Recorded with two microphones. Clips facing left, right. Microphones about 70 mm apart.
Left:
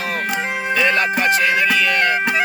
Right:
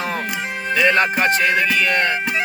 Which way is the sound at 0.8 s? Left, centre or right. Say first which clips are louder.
Right 2 dB; right.